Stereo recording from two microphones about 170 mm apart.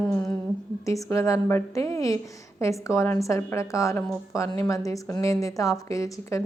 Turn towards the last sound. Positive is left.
turn(degrees=20)  # may be behind; listen again after turning